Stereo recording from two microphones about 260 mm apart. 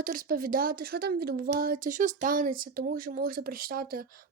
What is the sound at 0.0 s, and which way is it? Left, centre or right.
Speech, right.